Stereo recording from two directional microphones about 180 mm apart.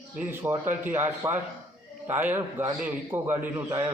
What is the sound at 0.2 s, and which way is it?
A man's voice, 10° right (ahead or behind).